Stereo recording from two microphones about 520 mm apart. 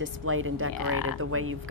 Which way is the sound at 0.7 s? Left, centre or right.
Left.